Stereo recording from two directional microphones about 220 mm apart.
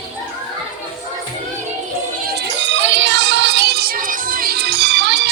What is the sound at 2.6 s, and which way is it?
Music, 55° right (ahead or behind).